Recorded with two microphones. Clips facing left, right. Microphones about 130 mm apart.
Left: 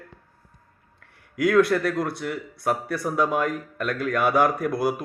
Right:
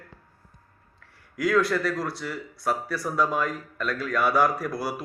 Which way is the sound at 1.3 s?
55° left (ahead or behind).